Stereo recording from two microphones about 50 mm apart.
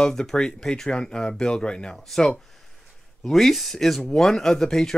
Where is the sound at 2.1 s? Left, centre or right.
Centre.